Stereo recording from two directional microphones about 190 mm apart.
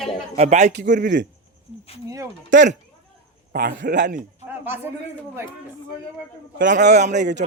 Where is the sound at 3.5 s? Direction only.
60° right (ahead or behind).